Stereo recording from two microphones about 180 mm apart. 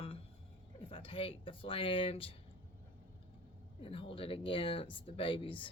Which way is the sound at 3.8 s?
30° left (ahead or behind).